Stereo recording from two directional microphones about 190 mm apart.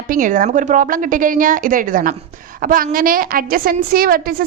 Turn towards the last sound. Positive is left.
turn(degrees=-50)  # may be behind; listen again after turning